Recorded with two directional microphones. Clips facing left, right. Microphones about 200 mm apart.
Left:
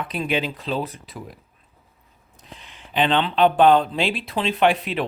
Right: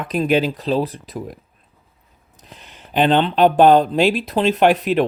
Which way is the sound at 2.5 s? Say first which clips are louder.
Right 4 dB; 40° right (ahead or behind).